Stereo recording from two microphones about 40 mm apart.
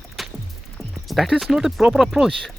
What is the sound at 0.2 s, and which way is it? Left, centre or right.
Music, centre.